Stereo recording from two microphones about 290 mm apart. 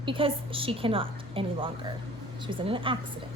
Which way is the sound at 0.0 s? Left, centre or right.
Centre.